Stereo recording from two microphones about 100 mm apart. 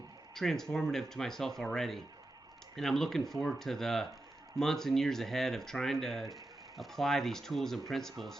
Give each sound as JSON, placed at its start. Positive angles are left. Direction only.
{"t": 0.3, "sound": "speech", "side_deg": 5}